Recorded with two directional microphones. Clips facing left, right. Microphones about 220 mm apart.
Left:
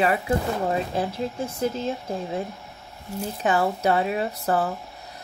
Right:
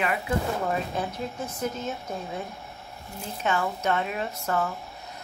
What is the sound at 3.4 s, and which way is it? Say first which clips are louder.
Speech: left 4 dB; 35° left (ahead or behind).